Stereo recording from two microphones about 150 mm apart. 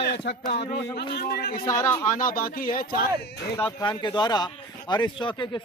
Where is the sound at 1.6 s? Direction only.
20° left (ahead or behind).